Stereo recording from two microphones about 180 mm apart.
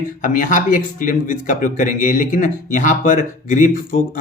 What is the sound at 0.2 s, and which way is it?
Speech, 45° left (ahead or behind).